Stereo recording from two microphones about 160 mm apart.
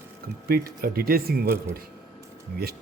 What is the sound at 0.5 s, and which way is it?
Speech, 70° right (ahead or behind).